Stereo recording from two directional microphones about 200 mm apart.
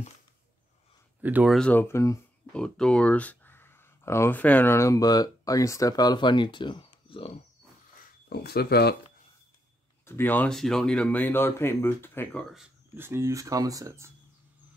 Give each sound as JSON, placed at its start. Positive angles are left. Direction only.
{"t": 1.2, "sound": "speech", "side_deg": -5}
{"t": 8.3, "sound": "speech", "side_deg": 50}
{"t": 10.0, "sound": "speech", "side_deg": 10}
{"t": 12.9, "sound": "speech", "side_deg": -10}